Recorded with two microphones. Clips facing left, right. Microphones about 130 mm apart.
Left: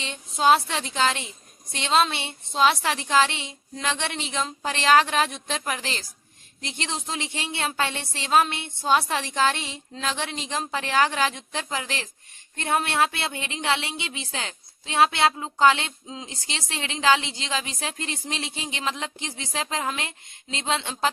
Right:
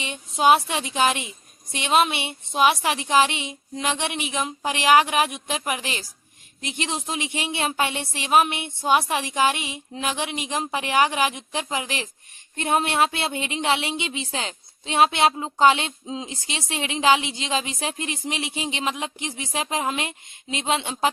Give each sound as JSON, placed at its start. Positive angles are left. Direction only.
{"t": 0.0, "sound": "a woman's voice", "side_deg": -15}